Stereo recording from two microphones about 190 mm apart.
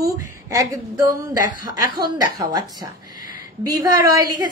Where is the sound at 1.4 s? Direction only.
45° left (ahead or behind).